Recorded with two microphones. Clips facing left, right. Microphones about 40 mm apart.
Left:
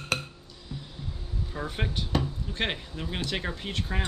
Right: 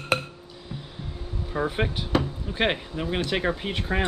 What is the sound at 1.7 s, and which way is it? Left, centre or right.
Speech, centre.